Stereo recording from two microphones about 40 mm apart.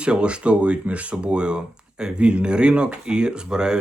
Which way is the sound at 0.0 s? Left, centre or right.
Right.